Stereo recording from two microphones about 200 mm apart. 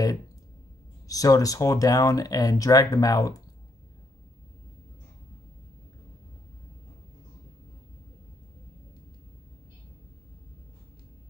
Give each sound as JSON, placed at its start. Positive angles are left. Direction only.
{"t": 1.0, "sound": "speech", "side_deg": 15}